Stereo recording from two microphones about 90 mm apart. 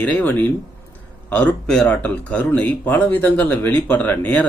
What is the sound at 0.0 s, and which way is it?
Speech, 15° left (ahead or behind).